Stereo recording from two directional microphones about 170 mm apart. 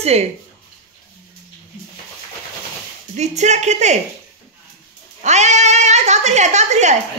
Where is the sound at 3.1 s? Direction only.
40° right (ahead or behind).